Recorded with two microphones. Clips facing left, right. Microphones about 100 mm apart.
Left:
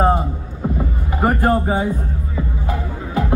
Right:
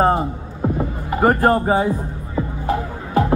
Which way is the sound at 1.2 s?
35° right (ahead or behind).